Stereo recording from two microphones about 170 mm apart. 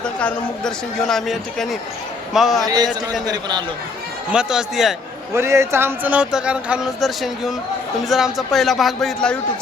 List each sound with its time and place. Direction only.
0.0 s speech: 5° left (ahead or behind)
2.6 s a man's voice: 25° right (ahead or behind)
4.3 s speech: 5° right (ahead or behind)
5.3 s speech: 15° right (ahead or behind); by 9.4 s 5° left (ahead or behind)